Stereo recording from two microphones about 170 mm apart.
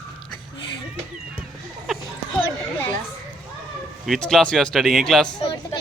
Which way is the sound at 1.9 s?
Centre (ahead or behind).